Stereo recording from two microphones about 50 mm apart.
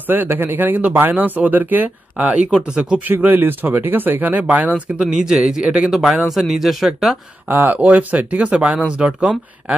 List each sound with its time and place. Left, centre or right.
0.1 s speech: right
2.2 s speech: right
3.1 s speech: right
5.0 s a man's voice: centre
5.9 s speech: centre
7.4 s speech: right
7.7 s speech: right